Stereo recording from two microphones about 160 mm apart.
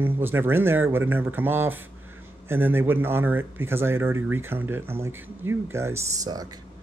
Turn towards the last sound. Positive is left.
turn(degrees=-20)  # may be behind; listen again after turning